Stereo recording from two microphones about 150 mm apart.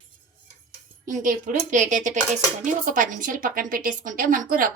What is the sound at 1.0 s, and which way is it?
A woman's voice, 65° right (ahead or behind).